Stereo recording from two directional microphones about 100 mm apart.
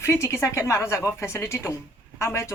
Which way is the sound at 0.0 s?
25° left (ahead or behind).